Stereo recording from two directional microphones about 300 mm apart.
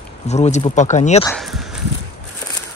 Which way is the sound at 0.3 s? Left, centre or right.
Centre.